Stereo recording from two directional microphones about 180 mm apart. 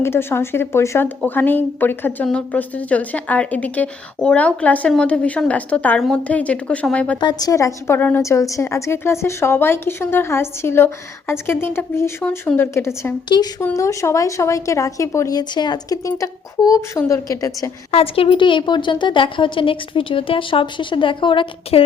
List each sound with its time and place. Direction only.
0.0 s speech: 15° left (ahead or behind)
7.2 s a woman's voice: 25° left (ahead or behind)
17.9 s a woman's voice: 30° left (ahead or behind)